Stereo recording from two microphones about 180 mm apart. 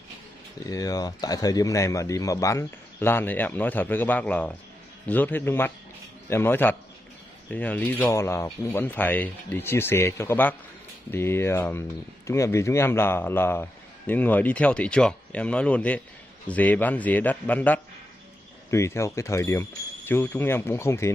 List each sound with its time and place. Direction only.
0.7 s speech: 20° left (ahead or behind)